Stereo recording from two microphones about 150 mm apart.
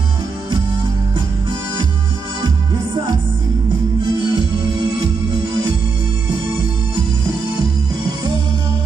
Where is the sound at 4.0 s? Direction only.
35° right (ahead or behind).